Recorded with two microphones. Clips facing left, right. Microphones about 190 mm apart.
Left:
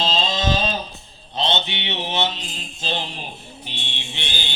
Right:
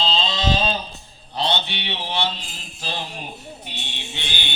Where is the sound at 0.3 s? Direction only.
45° left (ahead or behind).